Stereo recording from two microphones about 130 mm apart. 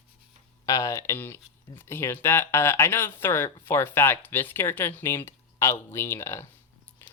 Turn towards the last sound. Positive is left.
turn(degrees=20)  # may be behind; listen again after turning